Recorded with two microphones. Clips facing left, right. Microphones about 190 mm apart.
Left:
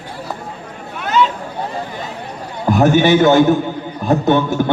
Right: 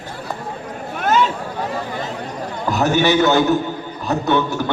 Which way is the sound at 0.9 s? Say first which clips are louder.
Left 1 dB; 50° right (ahead or behind).